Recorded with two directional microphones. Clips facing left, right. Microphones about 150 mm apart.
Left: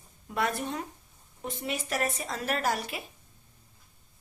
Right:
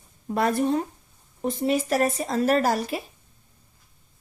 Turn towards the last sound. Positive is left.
turn(degrees=-35)  # may be behind; listen again after turning